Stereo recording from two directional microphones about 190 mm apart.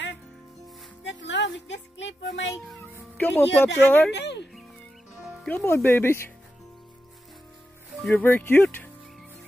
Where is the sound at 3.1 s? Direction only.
10° left (ahead or behind).